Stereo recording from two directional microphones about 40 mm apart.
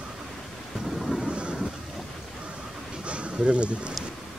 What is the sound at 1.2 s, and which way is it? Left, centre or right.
Vehicle, right.